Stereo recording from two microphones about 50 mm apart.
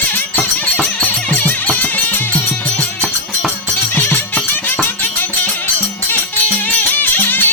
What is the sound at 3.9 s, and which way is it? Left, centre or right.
Music, left.